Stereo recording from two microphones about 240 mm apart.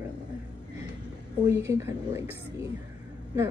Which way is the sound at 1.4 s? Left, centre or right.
Centre.